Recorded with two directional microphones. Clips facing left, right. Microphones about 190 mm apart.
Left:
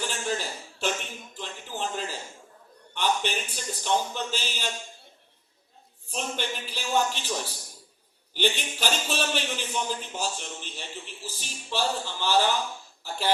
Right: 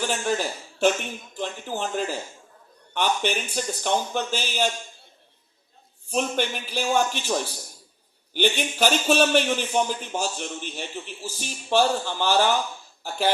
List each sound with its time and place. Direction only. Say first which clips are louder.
0.1 s a sound: right 5 dB; 55° right (ahead or behind)
1.4 s speech: right 5 dB; 55° right (ahead or behind)
6.1 s a man's voice: right 7 dB; 55° right (ahead or behind)